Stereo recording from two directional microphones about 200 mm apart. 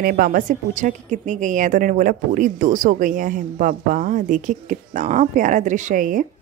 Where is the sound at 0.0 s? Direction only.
45° right (ahead or behind).